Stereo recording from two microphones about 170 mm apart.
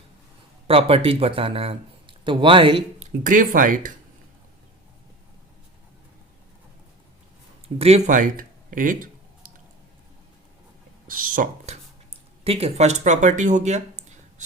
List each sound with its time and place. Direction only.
0.7 s speech: 35° right (ahead or behind)
3.2 s speech: 50° right (ahead or behind)
7.8 s speech: 40° right (ahead or behind)
11.1 s speech: 55° right (ahead or behind)
11.7 s a sound: 35° right (ahead or behind)